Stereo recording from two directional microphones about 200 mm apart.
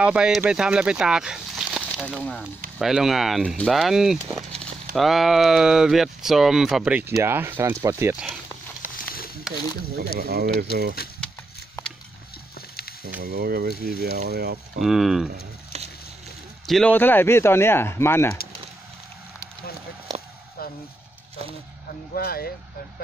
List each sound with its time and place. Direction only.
0.0 s speech: 5° right (ahead or behind)
9.1 s a sound: 50° left (ahead or behind)
9.9 s speech: 50° right (ahead or behind)
11.0 s speech: 50° left (ahead or behind)
13.2 s speech: 50° right (ahead or behind)
14.8 s speech: centre (ahead or behind)
16.6 s speech: 5° left (ahead or behind)
22.1 s speech: 50° left (ahead or behind)